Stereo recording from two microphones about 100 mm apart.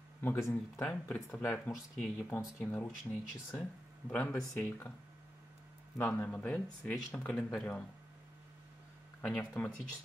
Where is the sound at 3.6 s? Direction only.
15° left (ahead or behind).